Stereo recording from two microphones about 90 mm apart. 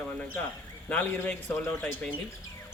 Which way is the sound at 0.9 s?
15° left (ahead or behind).